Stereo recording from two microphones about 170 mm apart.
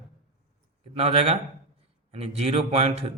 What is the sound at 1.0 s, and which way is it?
Speech, 40° right (ahead or behind).